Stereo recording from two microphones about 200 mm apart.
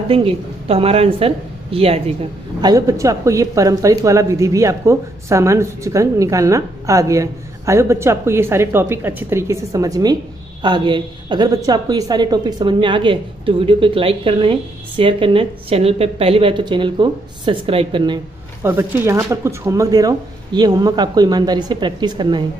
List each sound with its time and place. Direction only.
0.1 s a woman's voice: 30° right (ahead or behind)
2.6 s a woman's voice: 20° right (ahead or behind)
18.6 s a woman's voice: 10° right (ahead or behind)